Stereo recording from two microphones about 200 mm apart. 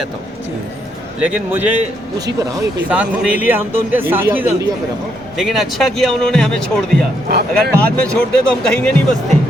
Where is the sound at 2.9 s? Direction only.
5° right (ahead or behind).